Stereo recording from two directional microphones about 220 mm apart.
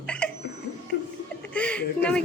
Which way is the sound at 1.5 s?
5° left (ahead or behind).